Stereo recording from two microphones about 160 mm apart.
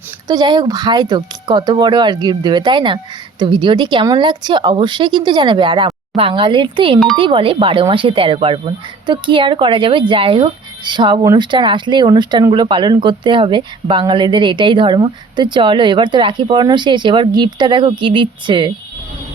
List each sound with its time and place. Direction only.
0.3 s speech: 25° right (ahead or behind)